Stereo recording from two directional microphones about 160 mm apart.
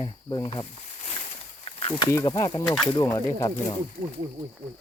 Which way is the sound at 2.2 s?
25° left (ahead or behind).